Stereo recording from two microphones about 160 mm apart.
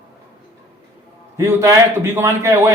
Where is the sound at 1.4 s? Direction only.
20° right (ahead or behind).